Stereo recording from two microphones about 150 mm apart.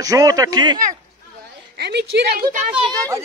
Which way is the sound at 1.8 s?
90° right.